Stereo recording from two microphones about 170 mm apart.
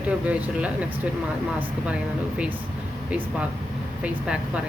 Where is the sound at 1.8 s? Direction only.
5° right (ahead or behind).